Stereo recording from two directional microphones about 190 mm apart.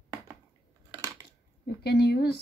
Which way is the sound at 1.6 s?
60° left (ahead or behind).